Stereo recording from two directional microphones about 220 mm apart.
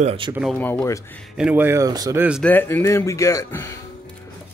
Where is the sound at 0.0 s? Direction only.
25° right (ahead or behind).